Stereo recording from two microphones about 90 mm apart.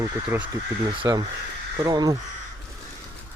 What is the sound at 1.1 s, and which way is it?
Speech, 50° right (ahead or behind).